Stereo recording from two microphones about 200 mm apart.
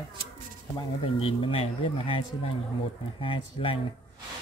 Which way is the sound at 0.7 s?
25° left (ahead or behind).